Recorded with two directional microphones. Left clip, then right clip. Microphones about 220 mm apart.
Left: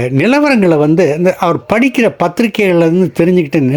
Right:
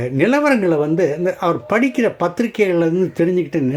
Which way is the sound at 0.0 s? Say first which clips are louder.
Left 5 dB; 40° left (ahead or behind).